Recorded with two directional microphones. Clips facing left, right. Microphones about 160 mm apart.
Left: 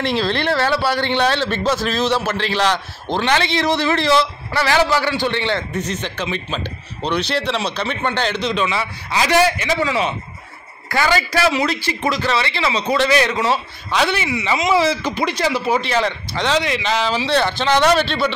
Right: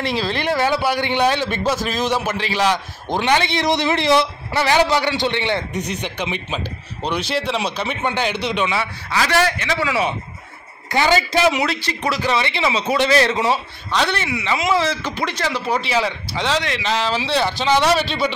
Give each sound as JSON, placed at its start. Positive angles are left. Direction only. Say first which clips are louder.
{"t": 0.0, "sound": "a man's voice", "louder": "left 2 dB", "side_deg": -5}
{"t": 9.1, "sound": "speech", "louder": "left 3 dB", "side_deg": 15}
{"t": 10.9, "sound": "a man's voice", "louder": "right 1 dB", "side_deg": -20}
{"t": 11.6, "sound": "speech", "louder": "left 2 dB", "side_deg": 0}
{"t": 12.1, "sound": "a man's voice", "louder": "right 1 dB", "side_deg": -15}
{"t": 12.7, "sound": "a man's voice", "louder": "left 3 dB", "side_deg": -10}
{"t": 13.0, "sound": "a man's voice", "louder": "right 1 dB", "side_deg": -30}
{"t": 13.8, "sound": "speech", "louder": "left 2 dB", "side_deg": 5}
{"t": 15.8, "sound": "speech", "louder": "left 1 dB", "side_deg": -5}